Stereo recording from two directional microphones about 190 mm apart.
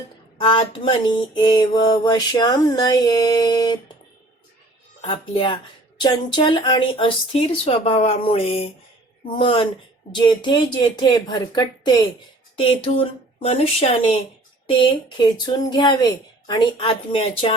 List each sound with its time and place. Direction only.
0.3 s mantra: 25° left (ahead or behind)
4.9 s speech: 30° left (ahead or behind)
6.0 s mantra: 25° left (ahead or behind)
12.5 s speech: 30° left (ahead or behind)
14.7 s mantra: 25° left (ahead or behind)